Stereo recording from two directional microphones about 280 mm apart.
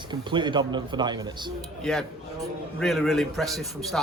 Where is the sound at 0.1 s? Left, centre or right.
Centre.